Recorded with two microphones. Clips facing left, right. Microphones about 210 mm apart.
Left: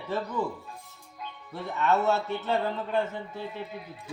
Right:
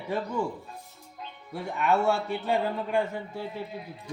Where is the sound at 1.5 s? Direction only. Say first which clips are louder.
Even; 15° right (ahead or behind).